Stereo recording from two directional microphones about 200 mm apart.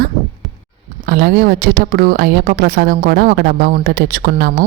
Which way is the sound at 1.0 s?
50° right (ahead or behind).